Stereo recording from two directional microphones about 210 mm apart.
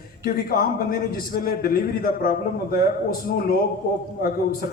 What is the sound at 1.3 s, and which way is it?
A man's voice, 45° left (ahead or behind).